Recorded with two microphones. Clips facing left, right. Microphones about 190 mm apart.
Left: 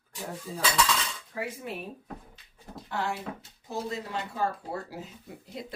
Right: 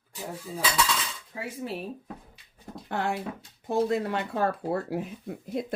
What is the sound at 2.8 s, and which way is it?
Speech, 55° right (ahead or behind).